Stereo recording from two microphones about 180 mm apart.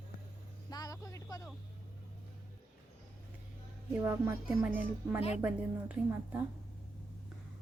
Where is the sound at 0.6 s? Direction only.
20° left (ahead or behind).